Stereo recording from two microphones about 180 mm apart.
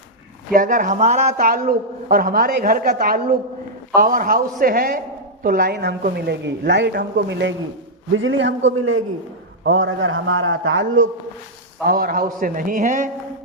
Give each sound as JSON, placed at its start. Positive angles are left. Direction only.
{"t": 0.5, "sound": "speech", "side_deg": -45}
{"t": 1.4, "sound": "a woman's voice", "side_deg": -50}
{"t": 8.1, "sound": "a man's voice", "side_deg": -90}
{"t": 11.9, "sound": "a woman's voice", "side_deg": -55}